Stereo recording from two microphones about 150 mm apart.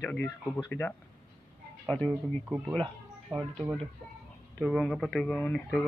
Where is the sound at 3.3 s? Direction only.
5° left (ahead or behind).